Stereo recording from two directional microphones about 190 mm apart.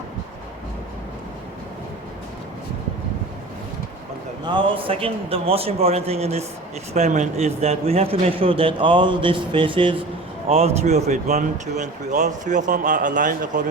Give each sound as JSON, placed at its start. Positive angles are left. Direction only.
{"t": 4.4, "sound": "a man's voice", "side_deg": -25}